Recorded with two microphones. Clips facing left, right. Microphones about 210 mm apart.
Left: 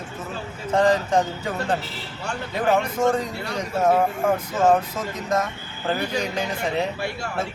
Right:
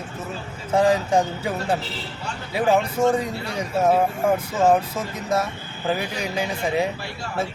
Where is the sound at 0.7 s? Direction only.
10° right (ahead or behind).